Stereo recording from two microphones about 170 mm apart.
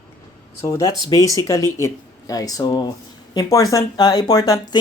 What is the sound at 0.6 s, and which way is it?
Speech, 20° left (ahead or behind).